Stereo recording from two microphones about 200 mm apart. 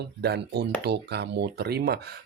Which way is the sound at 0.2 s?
55° right (ahead or behind).